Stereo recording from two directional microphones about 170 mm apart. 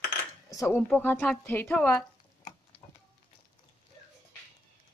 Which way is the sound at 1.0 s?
10° left (ahead or behind).